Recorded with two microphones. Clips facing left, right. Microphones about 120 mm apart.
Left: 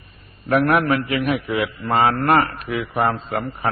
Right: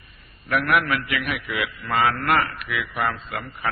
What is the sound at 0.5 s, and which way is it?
A man's voice, 35° left (ahead or behind).